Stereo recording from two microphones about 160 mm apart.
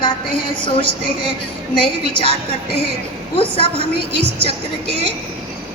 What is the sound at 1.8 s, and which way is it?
Speech, 35° left (ahead or behind).